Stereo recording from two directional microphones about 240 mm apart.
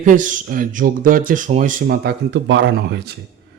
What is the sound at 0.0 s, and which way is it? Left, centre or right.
Speech, right.